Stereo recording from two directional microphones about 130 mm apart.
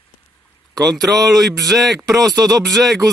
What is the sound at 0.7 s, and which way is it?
Speech, 30° right (ahead or behind).